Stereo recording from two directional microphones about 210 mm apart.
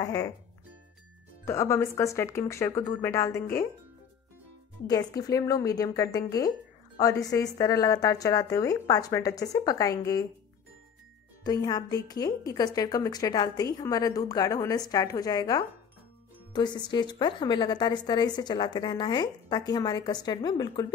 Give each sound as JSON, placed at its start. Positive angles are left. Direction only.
{"t": 0.0, "sound": "a woman's voice", "side_deg": 15}
{"t": 1.4, "sound": "a woman's voice", "side_deg": 15}
{"t": 4.8, "sound": "a woman's voice", "side_deg": 15}
{"t": 11.4, "sound": "a woman's voice", "side_deg": 20}